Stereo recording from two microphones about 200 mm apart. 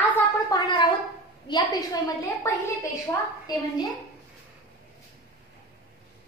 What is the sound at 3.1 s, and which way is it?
Speech, 20° left (ahead or behind).